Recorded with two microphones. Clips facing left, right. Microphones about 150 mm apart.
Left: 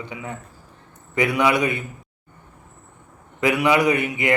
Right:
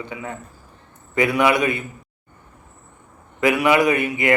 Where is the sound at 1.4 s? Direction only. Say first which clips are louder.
Right 1 dB; 20° left (ahead or behind).